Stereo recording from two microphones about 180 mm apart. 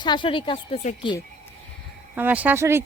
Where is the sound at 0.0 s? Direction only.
25° left (ahead or behind).